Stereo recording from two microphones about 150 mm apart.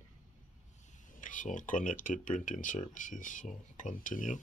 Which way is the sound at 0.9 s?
60° left (ahead or behind).